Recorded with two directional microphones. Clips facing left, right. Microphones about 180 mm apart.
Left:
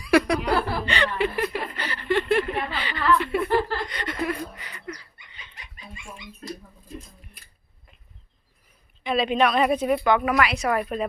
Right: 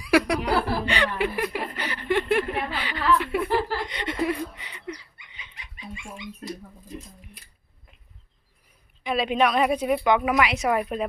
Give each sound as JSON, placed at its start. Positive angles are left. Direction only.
{"t": 0.0, "sound": "chuckle", "side_deg": -10}
{"t": 3.8, "sound": "a sound", "side_deg": -25}
{"t": 9.0, "sound": "a woman's voice", "side_deg": -10}